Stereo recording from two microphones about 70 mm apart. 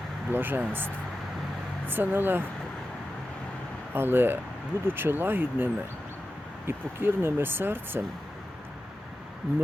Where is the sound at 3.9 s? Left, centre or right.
Right.